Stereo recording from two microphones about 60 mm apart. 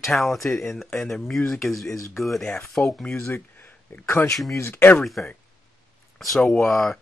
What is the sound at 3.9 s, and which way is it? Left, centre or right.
Speech, left.